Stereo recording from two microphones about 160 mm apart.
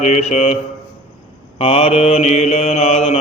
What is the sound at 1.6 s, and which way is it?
Mantra, 35° left (ahead or behind).